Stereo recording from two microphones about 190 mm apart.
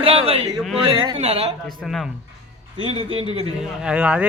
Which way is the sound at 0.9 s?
30° right (ahead or behind).